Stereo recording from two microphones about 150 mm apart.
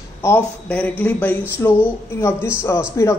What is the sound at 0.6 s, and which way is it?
A man's voice, 10° left (ahead or behind).